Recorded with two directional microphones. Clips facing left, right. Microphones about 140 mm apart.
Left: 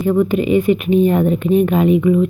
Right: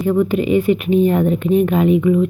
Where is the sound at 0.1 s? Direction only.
15° left (ahead or behind).